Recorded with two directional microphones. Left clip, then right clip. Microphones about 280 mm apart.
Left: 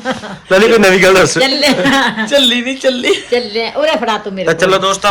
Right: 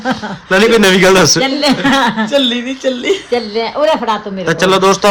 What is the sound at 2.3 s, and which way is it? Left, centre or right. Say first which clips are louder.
Speech: left 3 dB; centre.